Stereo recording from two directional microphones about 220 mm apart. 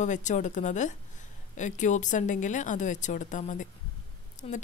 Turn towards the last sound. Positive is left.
turn(degrees=35)  # may be behind; listen again after turning